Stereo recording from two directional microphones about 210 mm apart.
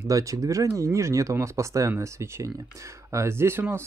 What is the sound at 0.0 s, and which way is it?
Speech, 15° right (ahead or behind).